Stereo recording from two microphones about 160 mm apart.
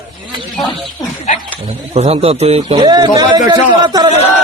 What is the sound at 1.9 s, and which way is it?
Speech, 40° right (ahead or behind).